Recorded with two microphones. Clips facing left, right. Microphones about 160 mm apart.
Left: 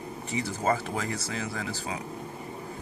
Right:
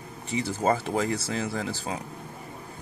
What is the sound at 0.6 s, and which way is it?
Speech, 30° right (ahead or behind).